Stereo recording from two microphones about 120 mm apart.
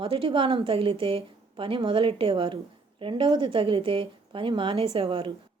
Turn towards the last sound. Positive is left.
turn(degrees=-50)  # may be behind; listen again after turning